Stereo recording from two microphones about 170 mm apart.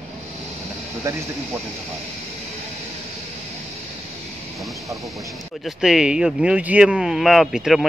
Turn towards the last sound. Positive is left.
turn(degrees=0)  # may be behind; listen again after turning